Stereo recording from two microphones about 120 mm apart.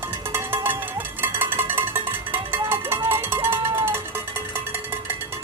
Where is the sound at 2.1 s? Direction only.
20° right (ahead or behind).